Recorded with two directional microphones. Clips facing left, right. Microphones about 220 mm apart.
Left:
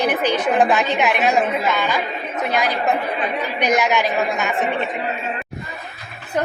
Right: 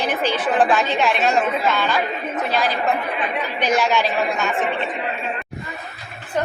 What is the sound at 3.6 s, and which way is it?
Speech, 15° left (ahead or behind).